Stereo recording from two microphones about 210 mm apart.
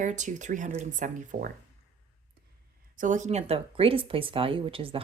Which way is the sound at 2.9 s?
35° right (ahead or behind).